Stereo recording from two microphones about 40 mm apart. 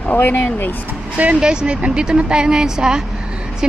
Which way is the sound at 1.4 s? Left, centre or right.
Right.